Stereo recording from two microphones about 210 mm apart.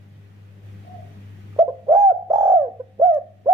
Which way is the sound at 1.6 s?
15° right (ahead or behind).